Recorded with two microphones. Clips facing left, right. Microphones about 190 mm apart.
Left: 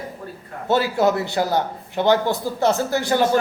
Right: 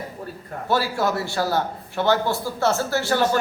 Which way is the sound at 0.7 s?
20° left (ahead or behind).